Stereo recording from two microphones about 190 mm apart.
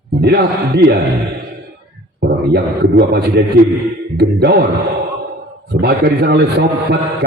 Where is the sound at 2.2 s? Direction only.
60° right (ahead or behind).